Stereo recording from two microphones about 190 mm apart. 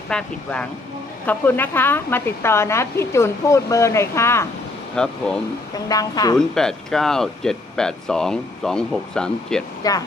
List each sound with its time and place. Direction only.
0.1 s a woman's voice: 5° left (ahead or behind)
5.9 s a woman's voice: 20° left (ahead or behind)
6.3 s speech: 5° left (ahead or behind)